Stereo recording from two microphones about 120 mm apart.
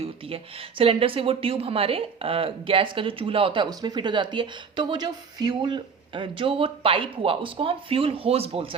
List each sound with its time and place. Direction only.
0.0 s a woman's voice: 50° right (ahead or behind)
3.7 s a woman's voice: 35° right (ahead or behind); by 8.7 s 55° right (ahead or behind)